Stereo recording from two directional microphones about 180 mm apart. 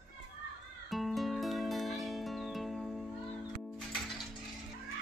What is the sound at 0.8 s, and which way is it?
Music, centre (ahead or behind).